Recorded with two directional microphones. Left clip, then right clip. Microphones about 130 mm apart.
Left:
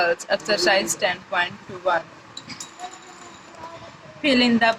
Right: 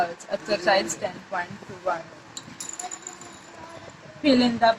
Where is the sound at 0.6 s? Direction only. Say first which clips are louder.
Even; 35° left (ahead or behind).